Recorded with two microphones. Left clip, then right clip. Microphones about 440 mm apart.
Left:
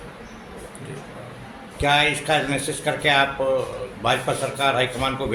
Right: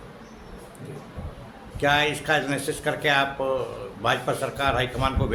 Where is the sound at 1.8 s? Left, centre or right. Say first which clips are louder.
Left 3 dB; right.